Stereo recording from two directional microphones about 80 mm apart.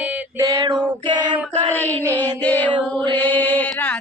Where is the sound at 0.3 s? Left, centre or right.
Right.